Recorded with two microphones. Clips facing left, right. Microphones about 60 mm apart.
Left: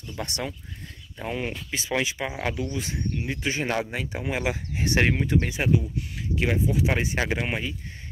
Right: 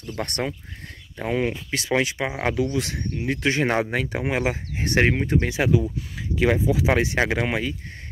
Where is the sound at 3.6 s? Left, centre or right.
Right.